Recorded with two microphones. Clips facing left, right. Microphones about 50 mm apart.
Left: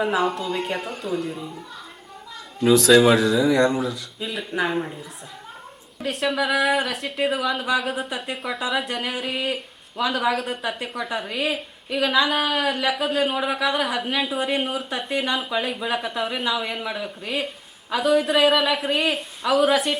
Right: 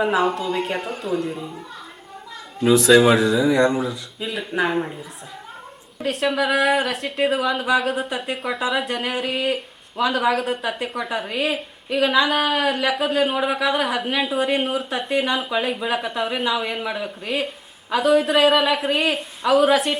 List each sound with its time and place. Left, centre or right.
0.0 s a woman's voice: centre
2.6 s a woman's voice: centre
6.0 s a woman's voice: centre